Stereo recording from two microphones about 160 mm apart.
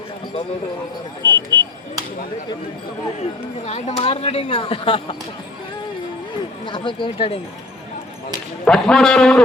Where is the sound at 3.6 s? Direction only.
40° left (ahead or behind).